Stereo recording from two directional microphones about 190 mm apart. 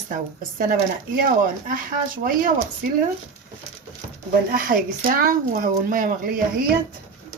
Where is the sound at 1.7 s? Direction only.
45° right (ahead or behind).